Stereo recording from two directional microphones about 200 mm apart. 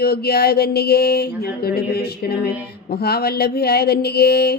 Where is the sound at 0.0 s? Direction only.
50° left (ahead or behind).